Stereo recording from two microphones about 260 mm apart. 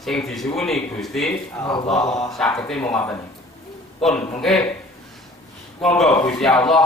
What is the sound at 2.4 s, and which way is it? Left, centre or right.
Speech, centre.